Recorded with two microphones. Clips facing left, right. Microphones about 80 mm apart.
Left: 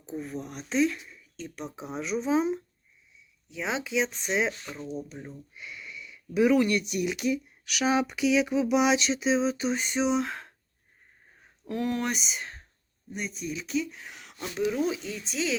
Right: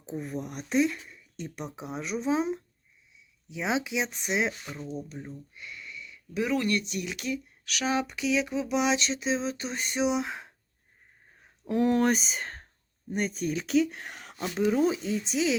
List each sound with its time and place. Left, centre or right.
0.0 s speech: centre
1.4 s speech: centre
3.5 s speech: centre
11.7 s speech: right
13.7 s speech: right
14.3 s speech: right
15.2 s speech: right